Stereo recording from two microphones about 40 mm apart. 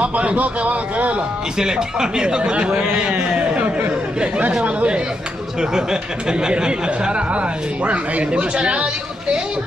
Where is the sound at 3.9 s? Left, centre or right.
Right.